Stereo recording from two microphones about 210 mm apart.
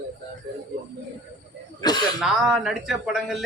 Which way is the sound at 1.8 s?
20° left (ahead or behind).